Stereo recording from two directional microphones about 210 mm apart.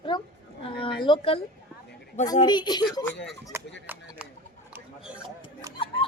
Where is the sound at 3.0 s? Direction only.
55° left (ahead or behind).